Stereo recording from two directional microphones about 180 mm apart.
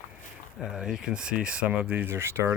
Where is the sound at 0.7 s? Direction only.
5° right (ahead or behind).